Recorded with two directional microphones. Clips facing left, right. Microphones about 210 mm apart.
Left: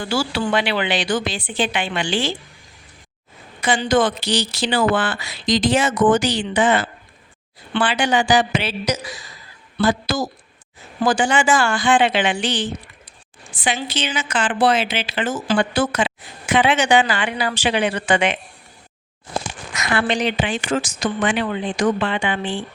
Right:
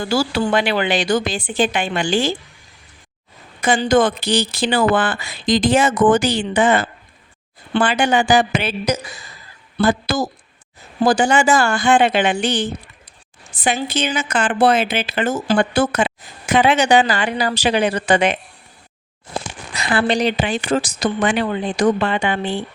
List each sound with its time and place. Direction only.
0.0 s speech: 40° right (ahead or behind)
3.6 s speech: 45° right (ahead or behind)
9.7 s a woman's voice: 55° right (ahead or behind)
11.0 s speech: 40° right (ahead or behind)
13.6 s speech: 40° right (ahead or behind)
14.9 s speech: 55° right (ahead or behind)
16.5 s speech: 40° right (ahead or behind)
19.7 s speech: 30° right (ahead or behind)